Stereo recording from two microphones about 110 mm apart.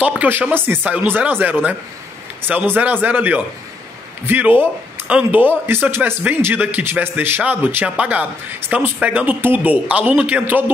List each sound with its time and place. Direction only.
0.2 s a man's voice: 15° right (ahead or behind)